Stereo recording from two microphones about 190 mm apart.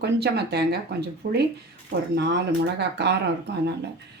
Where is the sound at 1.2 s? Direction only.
50° right (ahead or behind).